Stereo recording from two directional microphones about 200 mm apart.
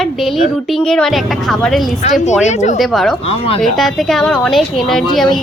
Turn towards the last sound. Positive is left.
turn(degrees=0)  # may be behind; listen again after turning